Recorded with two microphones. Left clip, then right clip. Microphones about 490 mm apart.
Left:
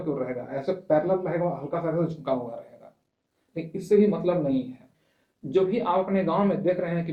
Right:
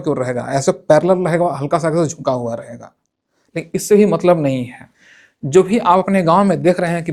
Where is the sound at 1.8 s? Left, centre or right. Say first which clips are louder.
Right 11 dB; right.